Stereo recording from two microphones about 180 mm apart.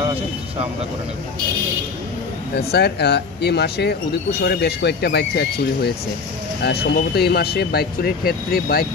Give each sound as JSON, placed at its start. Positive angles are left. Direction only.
{"t": 2.5, "sound": "speech", "side_deg": 65}